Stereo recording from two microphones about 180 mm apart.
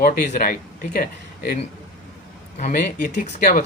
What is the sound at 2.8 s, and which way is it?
Speech, 60° left (ahead or behind).